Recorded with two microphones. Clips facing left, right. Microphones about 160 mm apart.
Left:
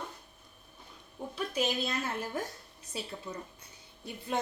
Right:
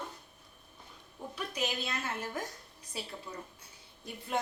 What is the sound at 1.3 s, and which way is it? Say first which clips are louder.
Speech: left 4 dB; 30° left (ahead or behind).